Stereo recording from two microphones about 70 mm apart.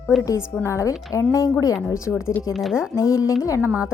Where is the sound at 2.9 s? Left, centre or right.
Left.